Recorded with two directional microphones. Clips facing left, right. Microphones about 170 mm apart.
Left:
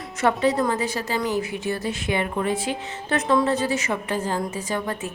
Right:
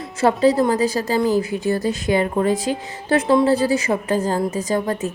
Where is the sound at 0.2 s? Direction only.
35° right (ahead or behind).